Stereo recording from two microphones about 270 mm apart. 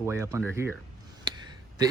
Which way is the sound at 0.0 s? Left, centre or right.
Centre.